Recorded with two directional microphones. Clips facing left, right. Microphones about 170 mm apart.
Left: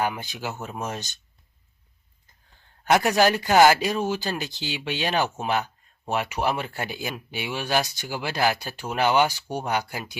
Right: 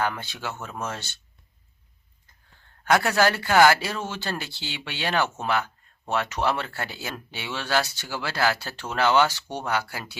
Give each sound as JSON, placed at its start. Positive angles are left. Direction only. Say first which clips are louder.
{"t": 0.0, "sound": "speech", "louder": "left 1 dB", "side_deg": 15}
{"t": 2.8, "sound": "speech", "louder": "left 2 dB", "side_deg": 20}